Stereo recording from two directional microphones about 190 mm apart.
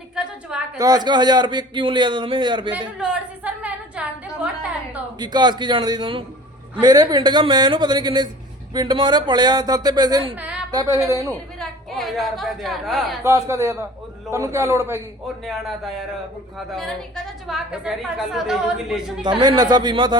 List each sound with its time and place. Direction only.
0.8 s a man's voice: 20° right (ahead or behind)
3.0 s a sound: 5° right (ahead or behind)
5.2 s a man's voice: 20° right (ahead or behind)
10.3 s a sound: 5° right (ahead or behind)
10.7 s a woman's voice: 20° right (ahead or behind)
11.9 s a woman's voice: centre (ahead or behind)
13.2 s a man's voice: 15° right (ahead or behind)
15.4 s a woman's voice: centre (ahead or behind)
17.4 s a woman's voice: 5° right (ahead or behind)
19.4 s a man's voice: 20° right (ahead or behind)